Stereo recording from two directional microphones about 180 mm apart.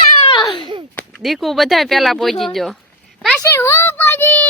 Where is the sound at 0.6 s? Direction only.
25° right (ahead or behind).